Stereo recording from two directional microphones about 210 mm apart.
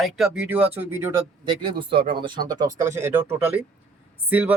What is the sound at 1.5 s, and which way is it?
Speech, 25° right (ahead or behind).